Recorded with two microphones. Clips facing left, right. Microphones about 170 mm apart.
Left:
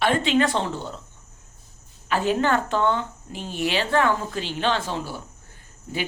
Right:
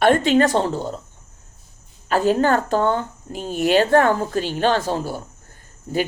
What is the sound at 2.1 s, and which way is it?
A woman's voice, 40° right (ahead or behind).